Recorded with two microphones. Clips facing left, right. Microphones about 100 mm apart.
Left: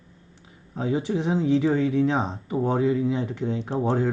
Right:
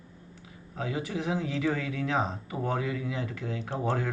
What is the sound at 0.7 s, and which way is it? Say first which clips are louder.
Speech: left 7 dB; 30° left (ahead or behind).